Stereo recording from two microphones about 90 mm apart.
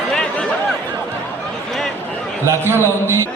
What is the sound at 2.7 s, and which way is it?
Speech, 30° right (ahead or behind).